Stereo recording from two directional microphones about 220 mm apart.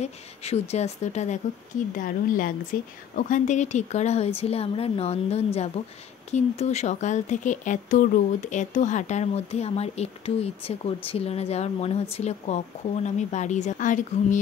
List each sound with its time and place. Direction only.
0.0 s speech: 30° left (ahead or behind)